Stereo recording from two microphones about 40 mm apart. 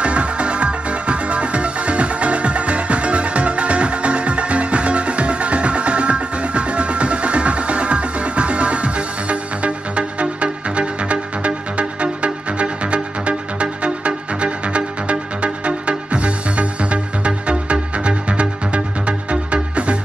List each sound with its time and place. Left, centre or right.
0.0 s music: right